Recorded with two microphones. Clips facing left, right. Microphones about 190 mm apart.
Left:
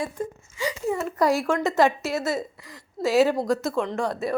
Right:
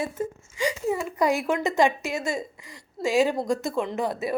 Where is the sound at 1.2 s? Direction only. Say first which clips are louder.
Left 2 dB; centre (ahead or behind).